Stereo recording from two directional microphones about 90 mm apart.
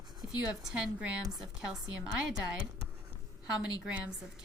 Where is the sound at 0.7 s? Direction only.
10° right (ahead or behind).